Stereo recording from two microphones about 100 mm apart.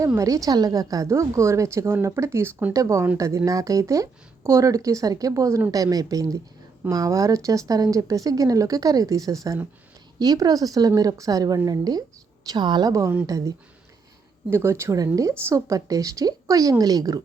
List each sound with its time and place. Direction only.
0.2 s a woman's voice: 35° right (ahead or behind)
2.7 s a woman's voice: 30° right (ahead or behind)
12.9 s speech: 30° right (ahead or behind)
14.5 s speech: 25° right (ahead or behind)